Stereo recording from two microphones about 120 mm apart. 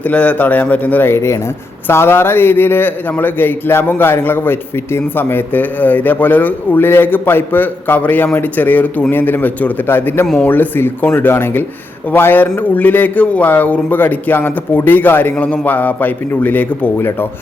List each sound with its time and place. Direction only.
0.0 s a man's voice: 10° left (ahead or behind)